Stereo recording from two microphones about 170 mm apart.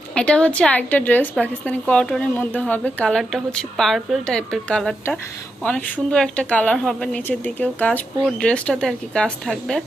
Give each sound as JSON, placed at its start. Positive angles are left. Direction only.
{"t": 0.1, "sound": "a woman's voice", "side_deg": 5}